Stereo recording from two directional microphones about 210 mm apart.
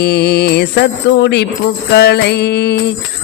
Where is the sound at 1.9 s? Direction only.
50° left (ahead or behind).